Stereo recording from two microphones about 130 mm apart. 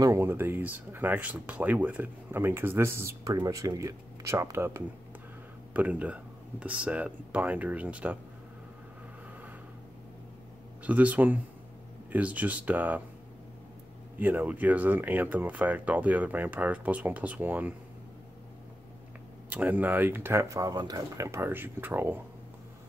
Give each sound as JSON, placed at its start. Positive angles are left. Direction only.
{"t": 0.0, "sound": "speech", "side_deg": -20}
{"t": 10.8, "sound": "speech", "side_deg": -10}
{"t": 14.1, "sound": "speech", "side_deg": -15}
{"t": 19.5, "sound": "speech", "side_deg": -15}